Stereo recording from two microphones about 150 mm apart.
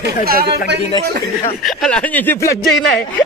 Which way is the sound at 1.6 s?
5° left (ahead or behind).